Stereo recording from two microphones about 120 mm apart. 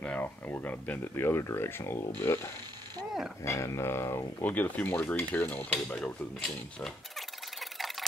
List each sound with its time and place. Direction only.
0.0 s speech: 15° left (ahead or behind)
6.4 s speech: centre (ahead or behind)
7.7 s a sound: centre (ahead or behind)